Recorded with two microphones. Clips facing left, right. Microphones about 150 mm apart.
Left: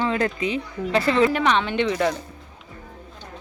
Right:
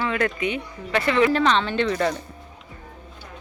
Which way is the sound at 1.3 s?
15° left (ahead or behind).